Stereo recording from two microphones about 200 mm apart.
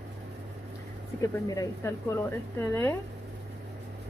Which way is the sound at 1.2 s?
15° left (ahead or behind).